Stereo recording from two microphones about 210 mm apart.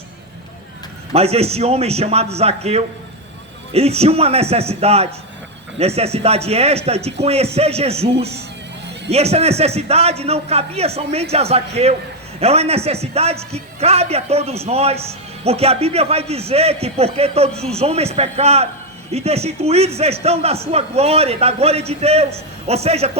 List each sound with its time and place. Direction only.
1.1 s a man's voice: 30° right (ahead or behind)